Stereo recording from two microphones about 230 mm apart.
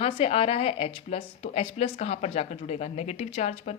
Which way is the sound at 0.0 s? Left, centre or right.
Left.